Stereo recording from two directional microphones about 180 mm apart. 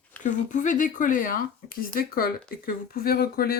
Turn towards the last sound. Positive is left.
turn(degrees=55)  # may be behind; listen again after turning